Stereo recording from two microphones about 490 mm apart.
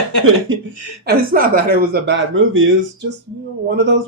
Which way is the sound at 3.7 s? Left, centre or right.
Right.